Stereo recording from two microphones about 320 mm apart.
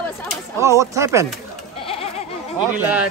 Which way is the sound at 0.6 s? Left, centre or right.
Centre.